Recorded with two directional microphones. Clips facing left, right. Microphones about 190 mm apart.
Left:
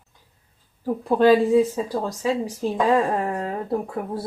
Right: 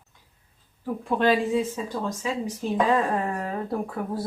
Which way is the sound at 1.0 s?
40° left (ahead or behind).